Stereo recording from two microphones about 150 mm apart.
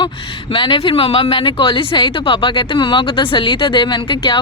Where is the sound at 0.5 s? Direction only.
35° left (ahead or behind).